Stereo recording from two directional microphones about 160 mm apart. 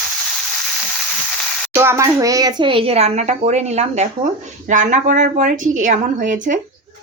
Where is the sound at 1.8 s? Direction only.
15° right (ahead or behind); by 6.5 s 55° right (ahead or behind).